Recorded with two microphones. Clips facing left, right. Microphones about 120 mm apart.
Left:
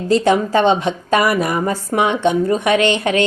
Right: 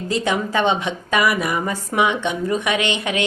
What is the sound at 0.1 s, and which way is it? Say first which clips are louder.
A woman's voice: left 7 dB; 35° left (ahead or behind).